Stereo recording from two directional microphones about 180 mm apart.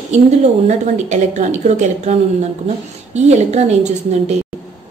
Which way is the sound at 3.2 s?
40° right (ahead or behind).